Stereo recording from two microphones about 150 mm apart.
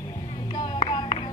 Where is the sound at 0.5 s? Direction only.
30° left (ahead or behind).